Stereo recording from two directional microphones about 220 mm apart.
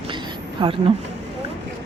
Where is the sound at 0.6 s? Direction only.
25° right (ahead or behind).